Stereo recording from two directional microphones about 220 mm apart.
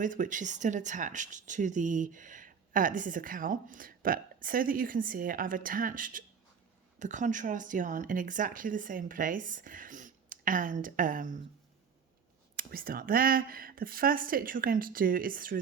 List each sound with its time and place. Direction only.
0.0 s speech: 35° right (ahead or behind)
12.5 s speech: 40° right (ahead or behind)